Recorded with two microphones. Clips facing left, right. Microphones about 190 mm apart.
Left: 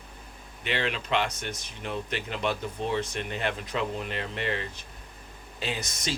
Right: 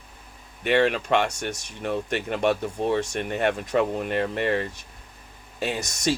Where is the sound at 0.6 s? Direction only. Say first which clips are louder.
Right 9 dB; 55° right (ahead or behind).